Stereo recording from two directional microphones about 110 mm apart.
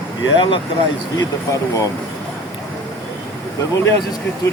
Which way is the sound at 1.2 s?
30° left (ahead or behind).